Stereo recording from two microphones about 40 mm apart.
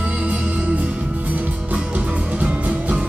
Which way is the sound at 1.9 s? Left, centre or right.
Right.